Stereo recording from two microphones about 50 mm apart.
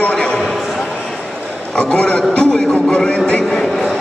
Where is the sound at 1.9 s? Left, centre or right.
Left.